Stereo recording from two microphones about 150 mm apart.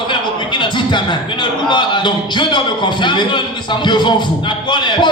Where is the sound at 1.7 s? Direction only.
30° left (ahead or behind).